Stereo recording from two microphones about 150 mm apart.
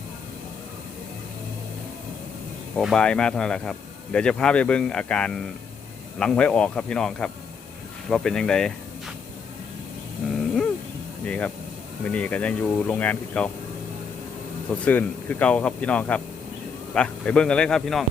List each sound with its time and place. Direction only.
2.7 s speech: 5° left (ahead or behind)
11.3 s speech: 10° left (ahead or behind)
14.7 s speech: 10° left (ahead or behind)